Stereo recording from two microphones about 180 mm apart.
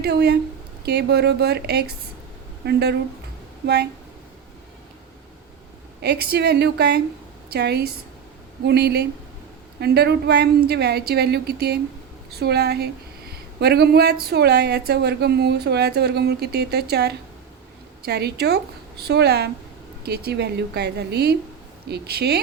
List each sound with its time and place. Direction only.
0.0 s speech: 65° right (ahead or behind)
6.0 s a woman's voice: 65° right (ahead or behind)